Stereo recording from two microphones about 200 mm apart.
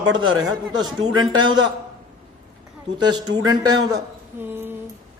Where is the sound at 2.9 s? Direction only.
20° right (ahead or behind).